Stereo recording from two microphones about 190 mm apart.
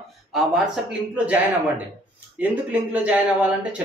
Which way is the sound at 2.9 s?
5° right (ahead or behind).